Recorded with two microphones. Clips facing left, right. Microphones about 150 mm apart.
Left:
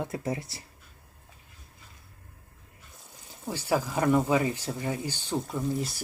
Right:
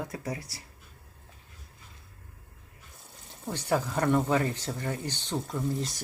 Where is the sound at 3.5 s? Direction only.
5° left (ahead or behind).